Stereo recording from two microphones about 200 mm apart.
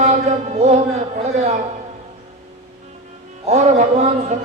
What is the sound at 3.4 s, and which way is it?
Chant, 35° right (ahead or behind).